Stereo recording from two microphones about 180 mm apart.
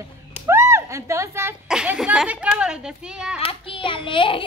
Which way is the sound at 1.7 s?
5° right (ahead or behind).